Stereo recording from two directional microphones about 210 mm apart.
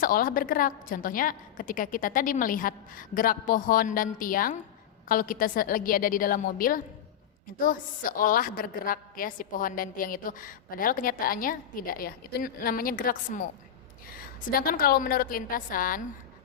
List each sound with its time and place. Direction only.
0.0 s a woman's voice: 40° left (ahead or behind)
14.6 s a woman's voice: 45° left (ahead or behind)